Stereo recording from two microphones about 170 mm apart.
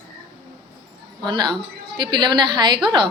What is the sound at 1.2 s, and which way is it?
Speech, 25° right (ahead or behind).